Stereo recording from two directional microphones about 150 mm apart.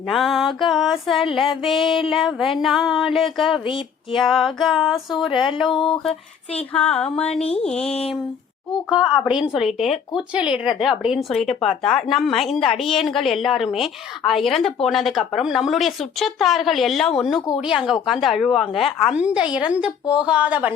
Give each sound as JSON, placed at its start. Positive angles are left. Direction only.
{"t": 0.1, "sound": "speech", "side_deg": 0}
{"t": 3.7, "sound": "a sound", "side_deg": 35}
{"t": 4.2, "sound": "speech", "side_deg": 0}
{"t": 7.3, "sound": "a sound", "side_deg": 45}
{"t": 7.6, "sound": "speech", "side_deg": 5}
{"t": 8.9, "sound": "a woman's voice", "side_deg": -5}